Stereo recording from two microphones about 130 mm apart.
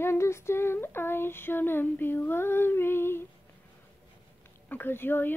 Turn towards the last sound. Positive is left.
turn(degrees=15)  # may be behind; listen again after turning